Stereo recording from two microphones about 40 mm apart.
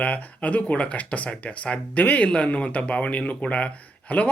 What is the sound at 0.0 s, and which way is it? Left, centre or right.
Speech, left.